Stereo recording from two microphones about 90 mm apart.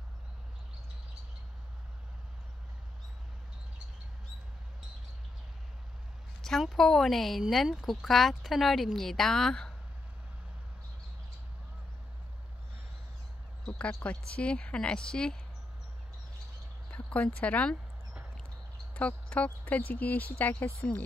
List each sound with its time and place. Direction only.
6.4 s speech: 5° left (ahead or behind)
13.7 s a sound: 15° left (ahead or behind)
14.0 s speech: 15° left (ahead or behind)
16.9 s speech: 15° left (ahead or behind)
18.9 s speech: 15° left (ahead or behind)